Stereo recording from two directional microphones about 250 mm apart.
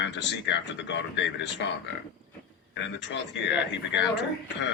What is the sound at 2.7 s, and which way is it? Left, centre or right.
Speech, left.